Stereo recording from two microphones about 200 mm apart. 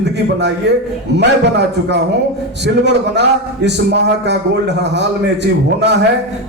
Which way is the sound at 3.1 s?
60° right (ahead or behind).